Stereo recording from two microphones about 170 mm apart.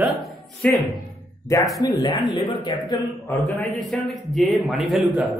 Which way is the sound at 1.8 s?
20° left (ahead or behind).